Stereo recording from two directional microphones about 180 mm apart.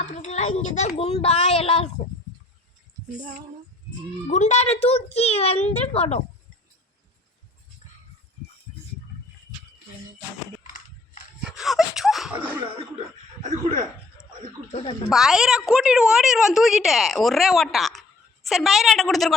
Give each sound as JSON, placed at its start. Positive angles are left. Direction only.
{"t": 0.0, "sound": "a woman's voice", "side_deg": 40}
{"t": 4.3, "sound": "a woman's voice", "side_deg": 40}
{"t": 10.6, "sound": "a sound", "side_deg": 50}
{"t": 11.4, "sound": "a sound", "side_deg": 0}
{"t": 14.7, "sound": "speech", "side_deg": 35}
{"t": 15.1, "sound": "a woman's voice", "side_deg": 0}